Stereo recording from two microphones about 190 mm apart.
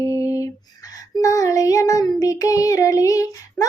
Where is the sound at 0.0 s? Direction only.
15° left (ahead or behind).